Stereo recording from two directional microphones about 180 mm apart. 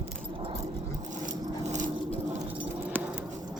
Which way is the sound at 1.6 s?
40° right (ahead or behind).